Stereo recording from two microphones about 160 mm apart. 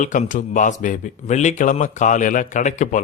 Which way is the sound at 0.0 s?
55° left (ahead or behind).